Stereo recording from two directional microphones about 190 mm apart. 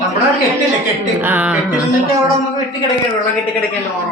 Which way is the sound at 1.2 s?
10° right (ahead or behind).